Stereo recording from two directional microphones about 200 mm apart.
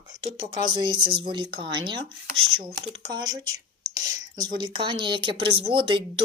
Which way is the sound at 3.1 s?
20° right (ahead or behind).